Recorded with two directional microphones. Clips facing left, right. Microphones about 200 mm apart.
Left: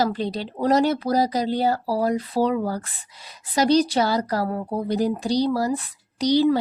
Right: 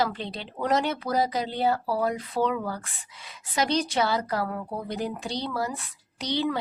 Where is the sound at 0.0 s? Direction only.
40° left (ahead or behind).